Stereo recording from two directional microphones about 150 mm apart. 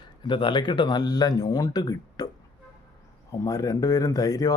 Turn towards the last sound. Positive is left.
turn(degrees=25)  # may be behind; listen again after turning